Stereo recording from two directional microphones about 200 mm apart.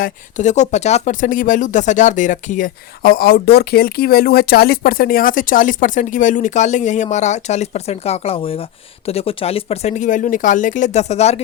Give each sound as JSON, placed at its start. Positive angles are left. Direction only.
{"t": 0.0, "sound": "speech", "side_deg": 40}